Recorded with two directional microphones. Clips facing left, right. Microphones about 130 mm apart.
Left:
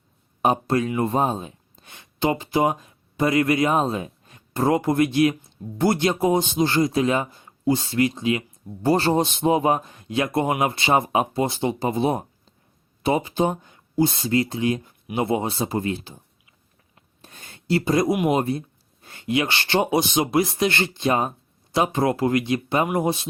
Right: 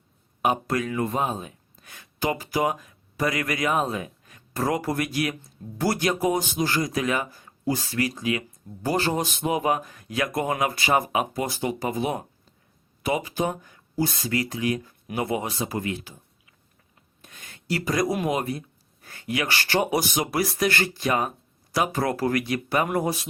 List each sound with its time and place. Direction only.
0.4 s speech: 30° left (ahead or behind)
17.2 s a sound: 30° left (ahead or behind)
18.3 s speech: 30° left (ahead or behind)